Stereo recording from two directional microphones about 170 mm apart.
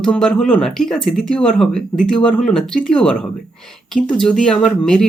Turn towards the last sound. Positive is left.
turn(degrees=5)  # may be behind; listen again after turning